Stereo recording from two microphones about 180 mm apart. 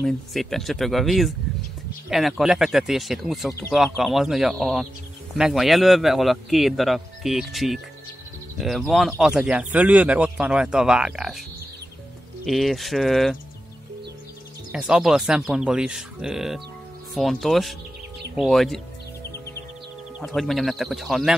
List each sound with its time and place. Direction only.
0.0 s speech: centre (ahead or behind)
12.4 s speech: centre (ahead or behind)
14.7 s speech: 5° right (ahead or behind)
20.2 s speech: centre (ahead or behind)